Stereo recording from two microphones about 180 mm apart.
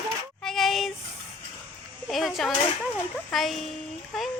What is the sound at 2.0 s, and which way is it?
Speech, centre (ahead or behind).